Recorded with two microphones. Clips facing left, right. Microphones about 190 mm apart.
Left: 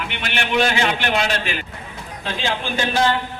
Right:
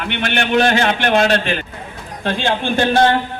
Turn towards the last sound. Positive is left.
turn(degrees=-60)  # may be behind; listen again after turning